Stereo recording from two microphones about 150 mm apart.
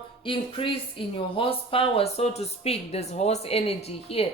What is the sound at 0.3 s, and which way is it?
Speech, 35° left (ahead or behind).